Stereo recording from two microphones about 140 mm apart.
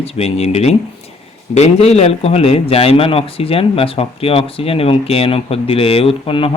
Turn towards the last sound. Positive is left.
turn(degrees=40)  # may be behind; listen again after turning